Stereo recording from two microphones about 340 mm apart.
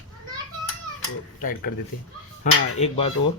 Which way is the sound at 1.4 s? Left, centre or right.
Left.